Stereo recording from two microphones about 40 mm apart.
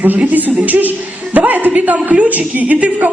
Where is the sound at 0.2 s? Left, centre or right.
Right.